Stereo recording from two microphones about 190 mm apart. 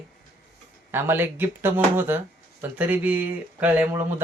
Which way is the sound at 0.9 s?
10° right (ahead or behind).